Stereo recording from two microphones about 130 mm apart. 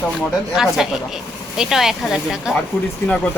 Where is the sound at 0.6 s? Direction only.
5° right (ahead or behind).